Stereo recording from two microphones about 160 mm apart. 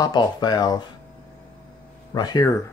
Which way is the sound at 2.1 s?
25° left (ahead or behind).